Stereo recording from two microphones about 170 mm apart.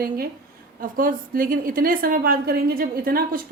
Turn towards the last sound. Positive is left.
turn(degrees=-60)  # may be behind; listen again after turning